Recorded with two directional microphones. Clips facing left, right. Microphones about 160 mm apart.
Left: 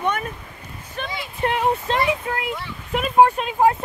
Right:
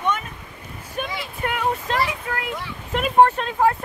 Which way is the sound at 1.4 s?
30° left (ahead or behind).